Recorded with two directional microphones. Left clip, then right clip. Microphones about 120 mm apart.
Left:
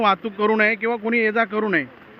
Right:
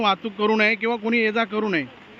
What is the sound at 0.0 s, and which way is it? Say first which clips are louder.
Speech: left 2 dB; 25° right (ahead or behind).